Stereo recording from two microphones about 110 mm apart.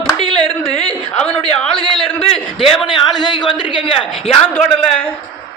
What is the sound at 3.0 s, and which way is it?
Speech, 45° left (ahead or behind).